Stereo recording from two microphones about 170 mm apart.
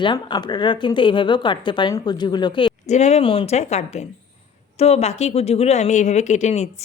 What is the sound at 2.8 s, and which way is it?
Speech, 40° left (ahead or behind).